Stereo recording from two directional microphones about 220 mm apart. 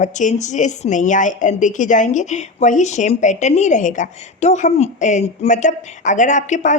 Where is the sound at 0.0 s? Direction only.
35° left (ahead or behind).